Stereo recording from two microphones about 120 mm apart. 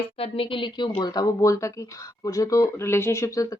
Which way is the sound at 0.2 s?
50° left (ahead or behind).